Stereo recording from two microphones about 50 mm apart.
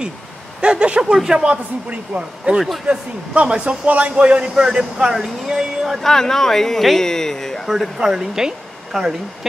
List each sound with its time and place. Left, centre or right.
0.6 s speech: centre
1.5 s speech: right; by 5.9 s centre
5.9 s speech: centre
7.6 s speech: centre